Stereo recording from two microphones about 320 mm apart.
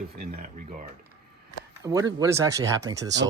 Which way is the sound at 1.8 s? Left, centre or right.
Centre.